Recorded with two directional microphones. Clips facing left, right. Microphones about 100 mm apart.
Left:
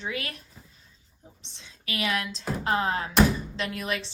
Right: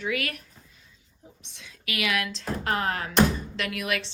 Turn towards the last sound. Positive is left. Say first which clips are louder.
# right 1 dB
turn(degrees=30)  # may be behind; listen again after turning